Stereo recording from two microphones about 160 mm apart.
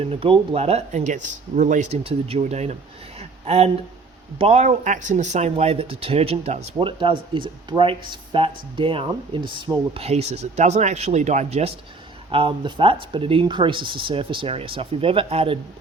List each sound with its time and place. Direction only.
0.0 s speech: 35° right (ahead or behind)
3.2 s a sound: 40° right (ahead or behind)
4.4 s speech: 40° right (ahead or behind)